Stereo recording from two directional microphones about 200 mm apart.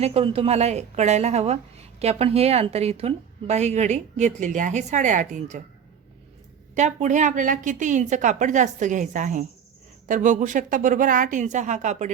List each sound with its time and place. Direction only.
0.0 s a woman's voice: 30° right (ahead or behind)
6.7 s a woman's voice: 35° right (ahead or behind)